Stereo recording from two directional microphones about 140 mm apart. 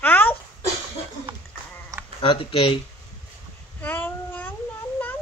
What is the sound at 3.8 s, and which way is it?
Child singing, 15° left (ahead or behind).